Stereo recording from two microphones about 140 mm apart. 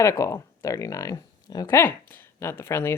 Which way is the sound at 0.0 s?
20° left (ahead or behind).